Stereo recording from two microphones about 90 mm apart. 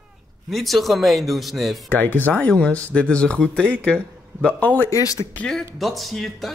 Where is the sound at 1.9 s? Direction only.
20° left (ahead or behind).